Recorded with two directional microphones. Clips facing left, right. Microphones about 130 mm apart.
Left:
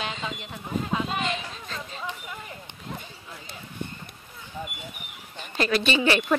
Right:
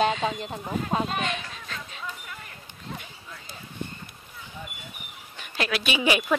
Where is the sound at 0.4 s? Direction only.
40° right (ahead or behind).